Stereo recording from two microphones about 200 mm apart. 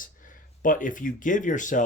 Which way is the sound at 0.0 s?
40° left (ahead or behind).